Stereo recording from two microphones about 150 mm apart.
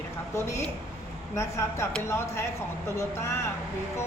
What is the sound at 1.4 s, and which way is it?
A woman's voice, 20° left (ahead or behind).